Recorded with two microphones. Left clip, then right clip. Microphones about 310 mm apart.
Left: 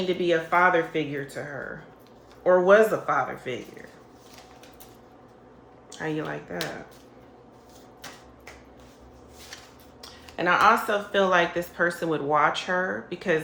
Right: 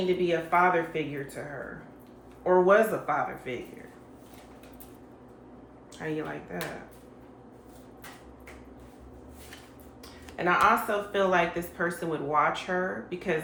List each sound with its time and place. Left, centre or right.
0.3 s speech: left
6.0 s speech: left
10.0 s speech: left